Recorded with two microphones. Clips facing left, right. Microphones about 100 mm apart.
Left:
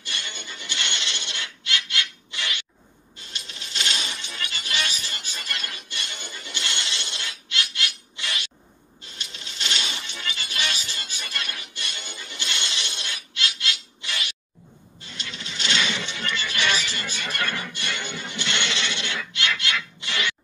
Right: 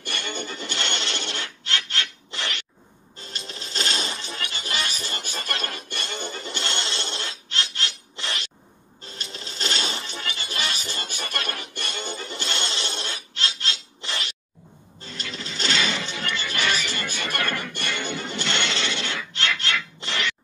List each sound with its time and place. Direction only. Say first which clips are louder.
0.0 s a sound: right 6 dB; 50° right (ahead or behind)
3.2 s music: right 4 dB; 35° right (ahead or behind)
15.0 s toilet flush: right 3 dB; 40° right (ahead or behind)
16.3 s music: left 1 dB; 40° right (ahead or behind)